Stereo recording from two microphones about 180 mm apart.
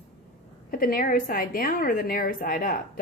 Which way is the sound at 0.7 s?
55° left (ahead or behind).